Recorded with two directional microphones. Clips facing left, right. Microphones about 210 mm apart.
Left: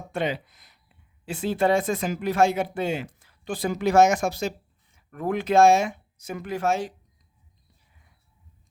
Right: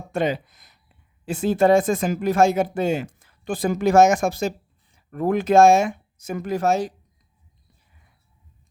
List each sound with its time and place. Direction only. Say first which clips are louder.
0.1 s speech: right 4 dB; 45° right (ahead or behind)